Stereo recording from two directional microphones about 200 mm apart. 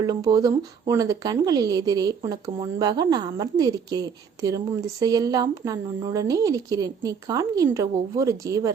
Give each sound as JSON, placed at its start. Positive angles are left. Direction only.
{"t": 0.0, "sound": "speech", "side_deg": -20}